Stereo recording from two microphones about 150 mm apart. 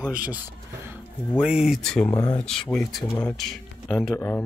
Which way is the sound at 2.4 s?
5° left (ahead or behind).